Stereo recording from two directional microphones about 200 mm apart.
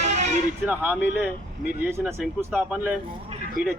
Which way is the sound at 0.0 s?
35° right (ahead or behind).